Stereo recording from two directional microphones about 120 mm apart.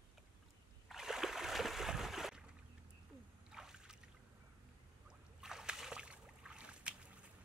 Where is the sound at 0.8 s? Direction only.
5° right (ahead or behind).